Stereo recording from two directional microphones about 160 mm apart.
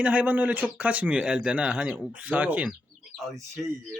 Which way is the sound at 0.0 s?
10° right (ahead or behind).